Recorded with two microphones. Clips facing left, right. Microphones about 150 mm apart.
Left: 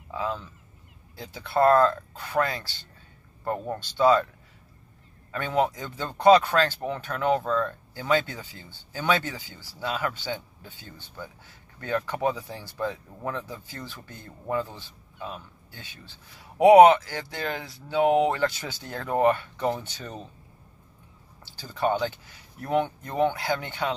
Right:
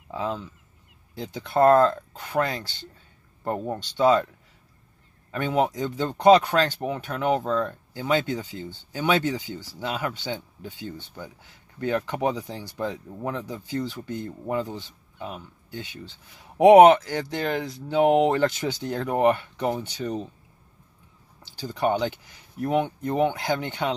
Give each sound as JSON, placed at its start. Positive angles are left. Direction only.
{"t": 0.1, "sound": "speech", "side_deg": -20}
{"t": 5.3, "sound": "speech", "side_deg": -20}
{"t": 21.5, "sound": "speech", "side_deg": -15}